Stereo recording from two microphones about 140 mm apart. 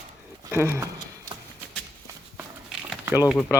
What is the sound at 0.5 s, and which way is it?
Speech, 20° right (ahead or behind).